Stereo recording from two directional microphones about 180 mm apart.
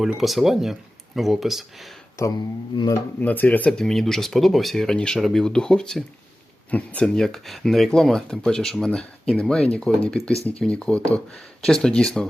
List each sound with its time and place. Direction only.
0.0 s speech: centre (ahead or behind)
2.2 s speech: 15° left (ahead or behind)
3.2 s speech: 10° left (ahead or behind)